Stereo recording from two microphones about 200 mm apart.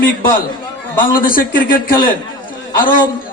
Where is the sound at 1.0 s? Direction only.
45° left (ahead or behind).